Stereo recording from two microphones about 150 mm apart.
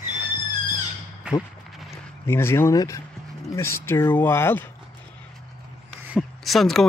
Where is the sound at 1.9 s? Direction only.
15° left (ahead or behind).